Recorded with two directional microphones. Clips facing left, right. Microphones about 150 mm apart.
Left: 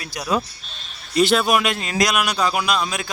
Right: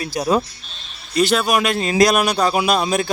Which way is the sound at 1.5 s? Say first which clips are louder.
Right 5 dB; 35° right (ahead or behind).